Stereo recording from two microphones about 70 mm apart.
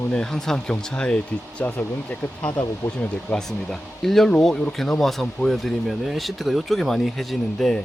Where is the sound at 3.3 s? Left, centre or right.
Centre.